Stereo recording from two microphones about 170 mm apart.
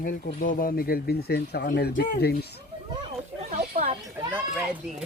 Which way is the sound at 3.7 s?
50° right (ahead or behind).